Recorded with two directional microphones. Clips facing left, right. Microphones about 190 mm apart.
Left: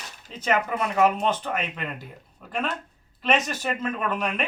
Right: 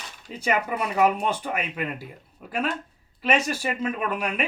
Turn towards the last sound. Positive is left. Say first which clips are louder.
# even
turn(degrees=-10)  # may be behind; listen again after turning